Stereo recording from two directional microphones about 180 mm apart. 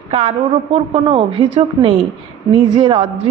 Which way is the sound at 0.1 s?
35° right (ahead or behind).